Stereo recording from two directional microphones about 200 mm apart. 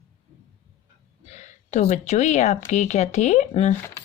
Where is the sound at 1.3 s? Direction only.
35° left (ahead or behind).